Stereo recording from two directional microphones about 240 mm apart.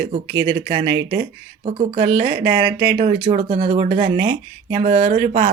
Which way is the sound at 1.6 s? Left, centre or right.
Right.